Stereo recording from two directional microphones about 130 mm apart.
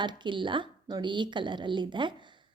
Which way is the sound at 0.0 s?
35° right (ahead or behind).